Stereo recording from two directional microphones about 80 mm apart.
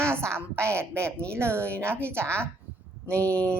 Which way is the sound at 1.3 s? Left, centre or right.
Right.